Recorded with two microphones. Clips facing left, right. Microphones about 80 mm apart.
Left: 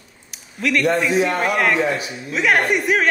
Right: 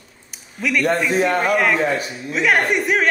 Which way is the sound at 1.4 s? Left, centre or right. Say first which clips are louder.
Right 1 dB; centre.